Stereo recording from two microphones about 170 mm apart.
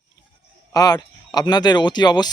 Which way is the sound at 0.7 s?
25° left (ahead or behind).